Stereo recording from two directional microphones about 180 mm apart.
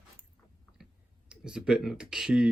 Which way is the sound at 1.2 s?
5° right (ahead or behind).